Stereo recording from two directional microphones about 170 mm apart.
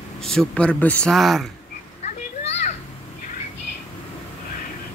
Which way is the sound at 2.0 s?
40° left (ahead or behind).